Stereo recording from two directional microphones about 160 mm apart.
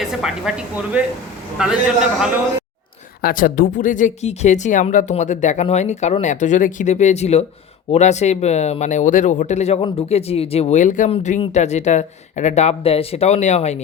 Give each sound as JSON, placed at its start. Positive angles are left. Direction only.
{"t": 0.0, "sound": "speech", "side_deg": -5}
{"t": 3.2, "sound": "speech", "side_deg": 65}